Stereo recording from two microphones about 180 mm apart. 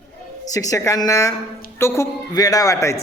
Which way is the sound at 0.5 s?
20° left (ahead or behind).